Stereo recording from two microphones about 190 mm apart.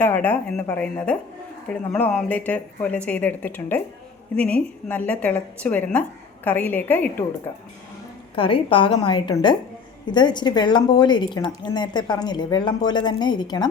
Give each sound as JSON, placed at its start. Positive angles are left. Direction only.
{"t": 0.0, "sound": "a woman's voice", "side_deg": 10}
{"t": 8.4, "sound": "speech", "side_deg": 30}